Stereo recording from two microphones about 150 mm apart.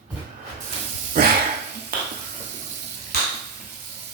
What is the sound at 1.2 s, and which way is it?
Dog, 75° right (ahead or behind).